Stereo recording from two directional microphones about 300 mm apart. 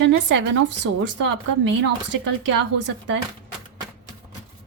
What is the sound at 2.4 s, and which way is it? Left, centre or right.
Speech, right.